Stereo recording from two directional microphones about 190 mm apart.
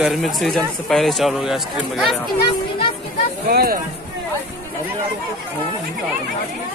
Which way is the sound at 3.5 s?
55° right (ahead or behind).